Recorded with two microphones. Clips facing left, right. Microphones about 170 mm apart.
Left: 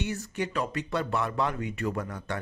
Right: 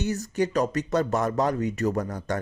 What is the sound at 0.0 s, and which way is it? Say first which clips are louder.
Speech: right 6 dB; 40° right (ahead or behind).